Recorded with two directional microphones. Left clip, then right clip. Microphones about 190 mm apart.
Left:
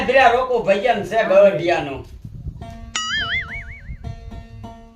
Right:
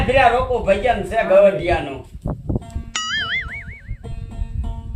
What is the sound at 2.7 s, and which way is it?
Music, centre (ahead or behind).